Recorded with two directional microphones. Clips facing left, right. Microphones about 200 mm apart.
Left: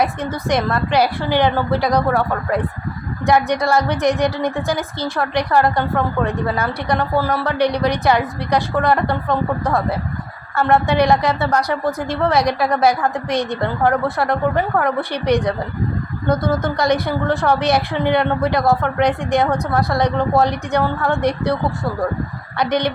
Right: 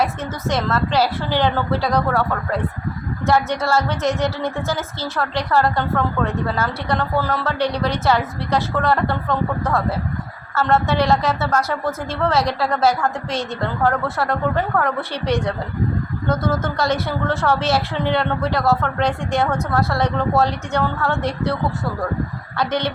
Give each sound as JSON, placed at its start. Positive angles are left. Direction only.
{"t": 0.0, "sound": "a woman's voice", "side_deg": 15}